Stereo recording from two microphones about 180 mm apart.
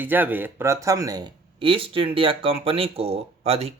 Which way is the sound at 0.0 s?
10° right (ahead or behind).